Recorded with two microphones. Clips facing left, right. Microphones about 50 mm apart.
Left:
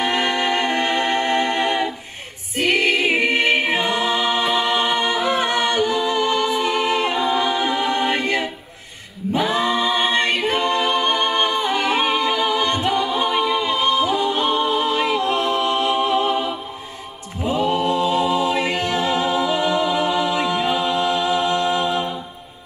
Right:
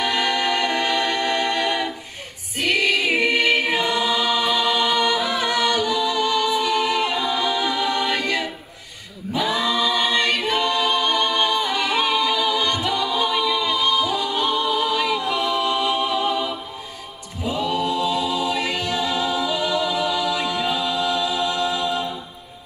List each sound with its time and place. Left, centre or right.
0.0 s music: left
2.5 s choir: left
9.3 s a capella: left
17.4 s music: left